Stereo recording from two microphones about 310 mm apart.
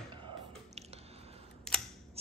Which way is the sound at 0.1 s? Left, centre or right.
Centre.